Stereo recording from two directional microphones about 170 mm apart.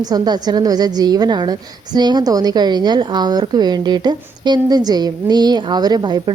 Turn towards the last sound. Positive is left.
turn(degrees=-25)  # may be behind; listen again after turning